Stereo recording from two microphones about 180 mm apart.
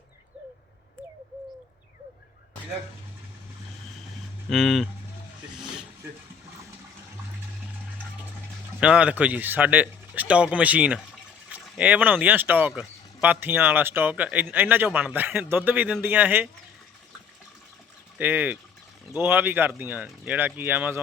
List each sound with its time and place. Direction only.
4.4 s speech: centre (ahead or behind)
8.8 s speech: 5° right (ahead or behind)
18.2 s speech: 10° right (ahead or behind)